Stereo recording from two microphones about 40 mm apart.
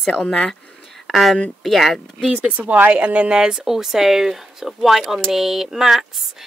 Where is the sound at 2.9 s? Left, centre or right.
Right.